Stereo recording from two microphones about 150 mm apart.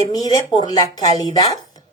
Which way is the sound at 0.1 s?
25° left (ahead or behind).